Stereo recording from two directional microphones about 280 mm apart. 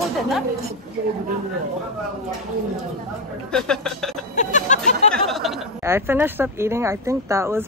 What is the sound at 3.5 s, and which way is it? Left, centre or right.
Speech, centre.